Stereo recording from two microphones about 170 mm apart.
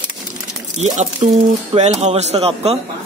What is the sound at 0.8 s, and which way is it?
A man's voice, 40° right (ahead or behind).